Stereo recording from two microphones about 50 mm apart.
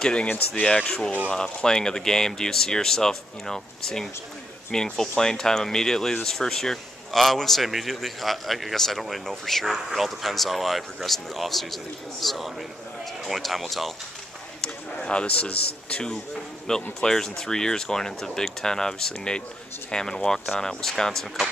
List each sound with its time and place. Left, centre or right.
0.0 s a man's voice: left; by 13.9 s centre
15.0 s a man's voice: left